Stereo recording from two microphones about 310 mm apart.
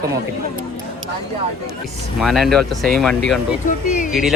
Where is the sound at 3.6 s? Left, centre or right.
Left.